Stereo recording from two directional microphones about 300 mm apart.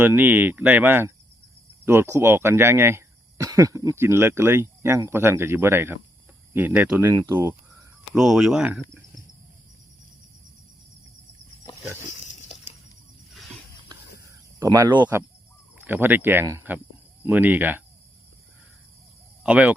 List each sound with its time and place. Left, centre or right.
0.0 s speech: centre
12.0 s pig: left
14.6 s speech: centre
19.4 s speech: centre